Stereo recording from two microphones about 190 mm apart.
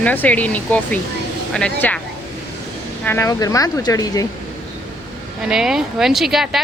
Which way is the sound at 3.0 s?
15° left (ahead or behind).